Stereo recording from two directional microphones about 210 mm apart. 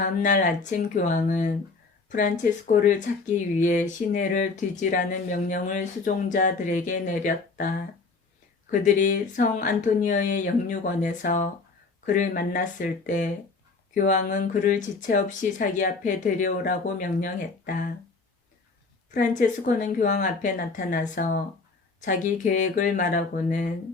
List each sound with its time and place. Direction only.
0.2 s speech: 35° left (ahead or behind)
8.8 s speech: 40° left (ahead or behind)
19.1 s speech: 40° left (ahead or behind)